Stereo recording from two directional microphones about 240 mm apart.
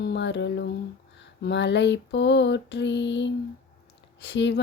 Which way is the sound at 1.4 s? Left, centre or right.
Left.